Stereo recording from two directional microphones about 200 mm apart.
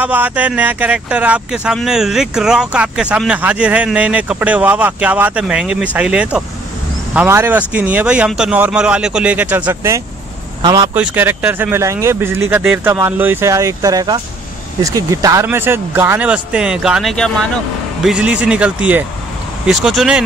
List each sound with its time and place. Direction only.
0.0 s speech: 10° right (ahead or behind)
11.0 s speech: 10° right (ahead or behind)